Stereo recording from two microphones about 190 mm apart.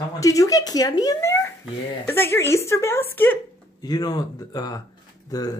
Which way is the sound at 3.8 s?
20° left (ahead or behind).